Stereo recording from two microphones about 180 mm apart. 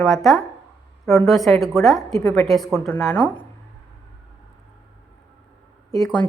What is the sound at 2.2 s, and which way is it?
Speech, 20° left (ahead or behind).